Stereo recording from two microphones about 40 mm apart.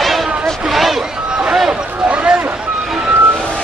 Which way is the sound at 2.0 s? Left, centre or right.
Right.